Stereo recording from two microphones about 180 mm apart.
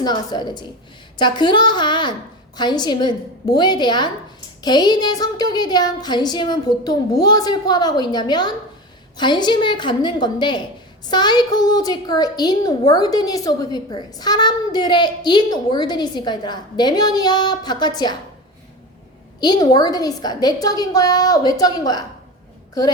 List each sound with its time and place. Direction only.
0.0 s a woman's voice: 20° left (ahead or behind)
19.4 s a woman's voice: 25° left (ahead or behind)